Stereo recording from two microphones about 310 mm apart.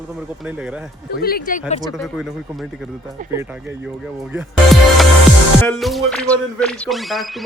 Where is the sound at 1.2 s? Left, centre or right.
Left.